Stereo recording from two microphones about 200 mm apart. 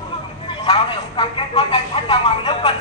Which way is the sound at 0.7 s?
25° left (ahead or behind).